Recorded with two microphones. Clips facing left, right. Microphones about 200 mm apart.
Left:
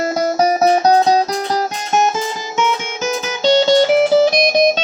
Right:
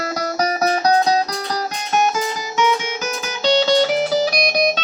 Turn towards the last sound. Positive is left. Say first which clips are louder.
# left 4 dB
turn(degrees=50)  # may be behind; listen again after turning